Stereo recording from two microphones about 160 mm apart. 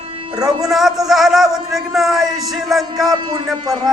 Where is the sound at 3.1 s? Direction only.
30° right (ahead or behind).